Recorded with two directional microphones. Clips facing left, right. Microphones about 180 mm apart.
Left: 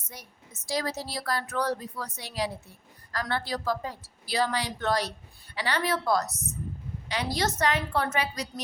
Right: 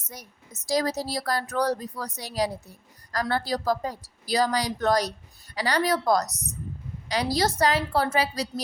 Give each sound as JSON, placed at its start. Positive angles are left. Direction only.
{"t": 0.0, "sound": "speech", "side_deg": -40}